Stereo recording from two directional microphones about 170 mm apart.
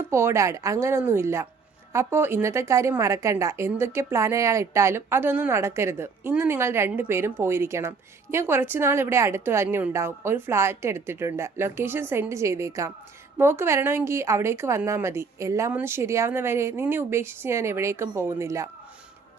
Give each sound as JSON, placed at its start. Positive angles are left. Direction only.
{"t": 0.1, "sound": "a woman's voice", "side_deg": -15}